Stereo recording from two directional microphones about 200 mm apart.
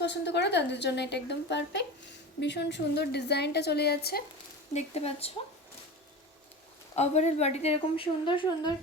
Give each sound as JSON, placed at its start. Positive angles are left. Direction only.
{"t": 0.0, "sound": "a woman's voice", "side_deg": 60}
{"t": 4.7, "sound": "a woman's voice", "side_deg": 30}
{"t": 6.9, "sound": "a woman's voice", "side_deg": 35}